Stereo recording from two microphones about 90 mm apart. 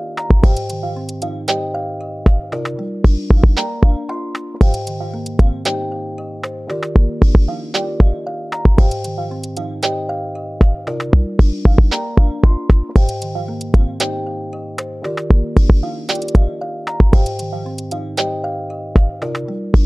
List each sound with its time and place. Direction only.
0.2 s music: centre (ahead or behind)